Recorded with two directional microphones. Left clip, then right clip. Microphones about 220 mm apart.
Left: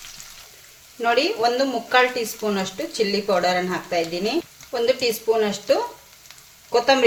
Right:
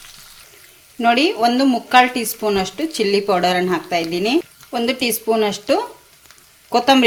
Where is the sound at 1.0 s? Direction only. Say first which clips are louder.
Right 4 dB; 40° right (ahead or behind).